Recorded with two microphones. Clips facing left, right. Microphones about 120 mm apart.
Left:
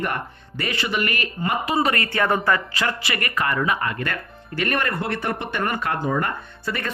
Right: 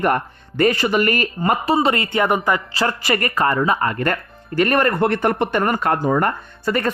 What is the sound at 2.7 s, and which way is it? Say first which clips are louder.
A man's voice: right 5 dB; 40° right (ahead or behind).